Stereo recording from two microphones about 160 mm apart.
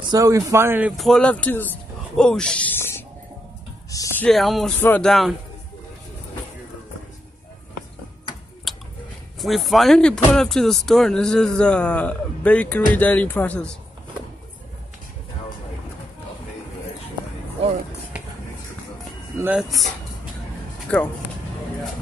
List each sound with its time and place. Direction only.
0.1 s speech: 20° right (ahead or behind)
0.9 s speech: centre (ahead or behind)
4.2 s a man's voice: centre (ahead or behind)
8.7 s a sound: centre (ahead or behind)
9.4 s a man's voice: centre (ahead or behind)
19.3 s a sound: 15° right (ahead or behind)